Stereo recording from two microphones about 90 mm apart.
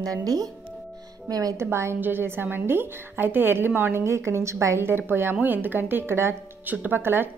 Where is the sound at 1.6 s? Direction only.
30° right (ahead or behind).